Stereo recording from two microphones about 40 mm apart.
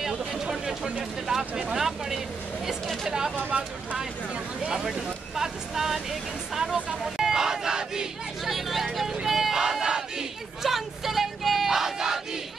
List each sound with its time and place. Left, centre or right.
0.3 s a sound: centre
1.6 s speech: centre
4.8 s speech: centre
8.5 s speech: centre
9.3 s music: centre
10.6 s a sound: centre